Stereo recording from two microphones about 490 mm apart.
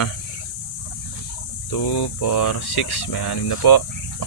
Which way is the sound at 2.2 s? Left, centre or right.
Left.